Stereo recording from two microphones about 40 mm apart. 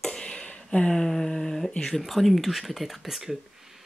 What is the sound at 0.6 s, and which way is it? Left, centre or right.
Speech, left.